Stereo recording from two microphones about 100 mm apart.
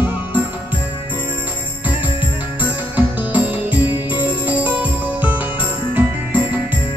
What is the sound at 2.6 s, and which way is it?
Music, 15° right (ahead or behind).